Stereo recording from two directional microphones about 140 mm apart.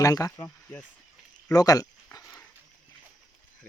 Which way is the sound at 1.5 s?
25° left (ahead or behind).